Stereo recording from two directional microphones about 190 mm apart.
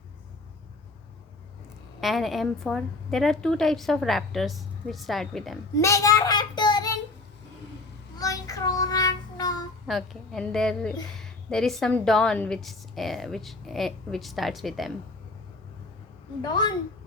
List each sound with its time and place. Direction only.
2.0 s a woman's voice: centre (ahead or behind)
5.7 s child singing: 15° left (ahead or behind)
8.2 s child singing: 20° left (ahead or behind)
9.8 s a woman's voice: centre (ahead or behind)
16.4 s a woman's voice: 20° left (ahead or behind)